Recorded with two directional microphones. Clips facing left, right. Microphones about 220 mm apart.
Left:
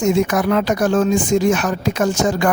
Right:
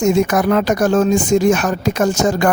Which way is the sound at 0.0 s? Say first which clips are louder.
Right 2 dB; 45° right (ahead or behind).